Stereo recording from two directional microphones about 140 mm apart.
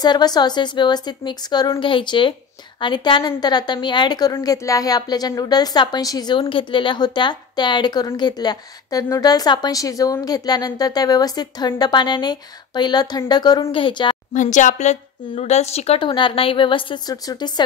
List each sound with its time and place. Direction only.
0.0 s a woman's voice: 30° left (ahead or behind)
14.3 s speech: 65° left (ahead or behind); by 17.6 s 30° left (ahead or behind)